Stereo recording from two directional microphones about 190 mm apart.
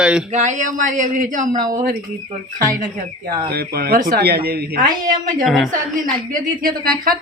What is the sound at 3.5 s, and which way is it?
Speech, 55° right (ahead or behind).